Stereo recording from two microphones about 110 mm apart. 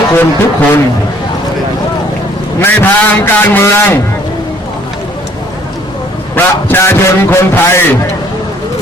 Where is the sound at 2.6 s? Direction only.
15° left (ahead or behind).